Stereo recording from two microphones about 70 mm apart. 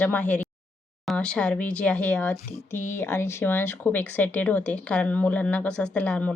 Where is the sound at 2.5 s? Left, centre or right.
Left.